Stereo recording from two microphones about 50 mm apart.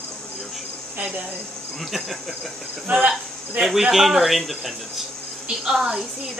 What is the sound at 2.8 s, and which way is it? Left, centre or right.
Cricket, right.